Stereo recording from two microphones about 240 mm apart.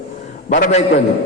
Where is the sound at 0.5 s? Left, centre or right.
Left.